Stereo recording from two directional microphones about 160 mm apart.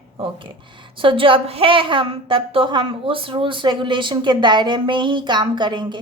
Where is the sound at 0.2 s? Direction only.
35° right (ahead or behind).